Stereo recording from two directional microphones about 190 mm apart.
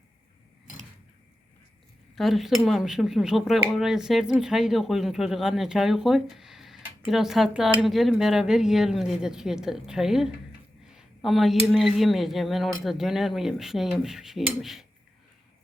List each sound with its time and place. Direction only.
2.1 s speech: centre (ahead or behind)